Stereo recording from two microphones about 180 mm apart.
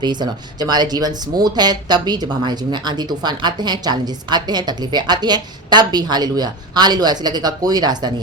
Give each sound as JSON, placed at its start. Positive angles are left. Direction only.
{"t": 0.0, "sound": "speech", "side_deg": -25}